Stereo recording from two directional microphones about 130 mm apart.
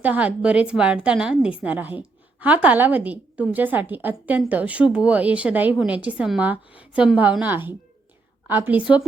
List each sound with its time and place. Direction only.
0.0 s a woman's voice: 10° right (ahead or behind)